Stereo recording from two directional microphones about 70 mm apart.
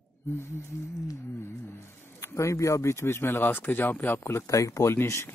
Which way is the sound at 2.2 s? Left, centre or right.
Left.